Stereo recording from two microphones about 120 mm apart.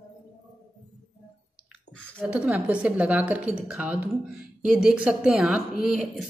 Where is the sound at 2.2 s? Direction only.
10° right (ahead or behind).